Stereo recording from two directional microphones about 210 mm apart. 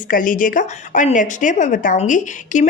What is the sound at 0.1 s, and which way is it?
Speech, 40° left (ahead or behind).